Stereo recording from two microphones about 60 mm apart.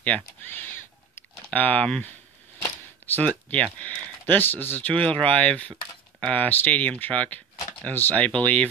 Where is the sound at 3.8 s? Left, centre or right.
Left.